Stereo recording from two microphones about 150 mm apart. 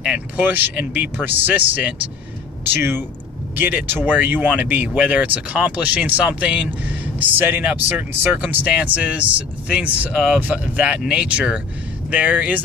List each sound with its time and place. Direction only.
0.0 s speech: 10° right (ahead or behind)